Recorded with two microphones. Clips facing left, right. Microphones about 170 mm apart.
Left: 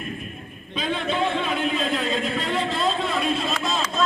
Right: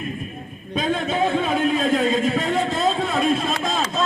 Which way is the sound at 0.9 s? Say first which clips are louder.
Right 3 dB; 45° right (ahead or behind).